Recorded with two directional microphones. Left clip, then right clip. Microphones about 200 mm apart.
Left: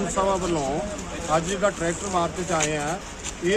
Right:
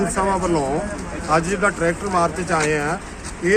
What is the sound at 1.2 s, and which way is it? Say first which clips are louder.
Speech: right 4 dB; 5° left (ahead or behind).